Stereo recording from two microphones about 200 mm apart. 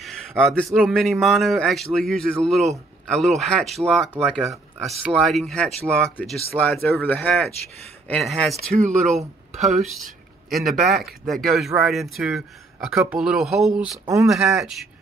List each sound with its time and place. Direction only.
0.0 s a sound: centre (ahead or behind)
0.7 s speech: centre (ahead or behind)
8.8 s speech: 35° right (ahead or behind)
10.5 s speech: centre (ahead or behind)